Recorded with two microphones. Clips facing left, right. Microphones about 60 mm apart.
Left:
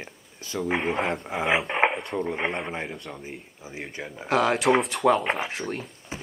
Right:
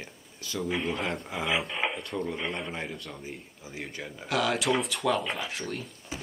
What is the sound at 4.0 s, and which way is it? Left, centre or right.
Speech, centre.